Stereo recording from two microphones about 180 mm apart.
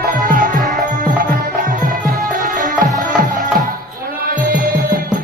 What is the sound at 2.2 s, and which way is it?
Music, 45° right (ahead or behind).